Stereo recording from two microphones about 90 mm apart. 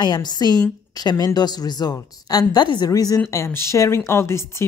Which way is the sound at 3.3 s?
30° left (ahead or behind).